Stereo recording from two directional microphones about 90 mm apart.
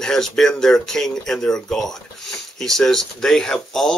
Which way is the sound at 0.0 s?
5° left (ahead or behind).